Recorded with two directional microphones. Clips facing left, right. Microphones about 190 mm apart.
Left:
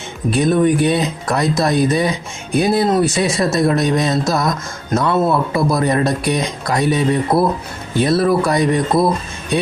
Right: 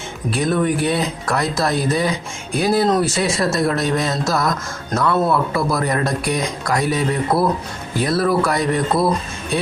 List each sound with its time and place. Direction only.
0.3 s speech: 20° left (ahead or behind)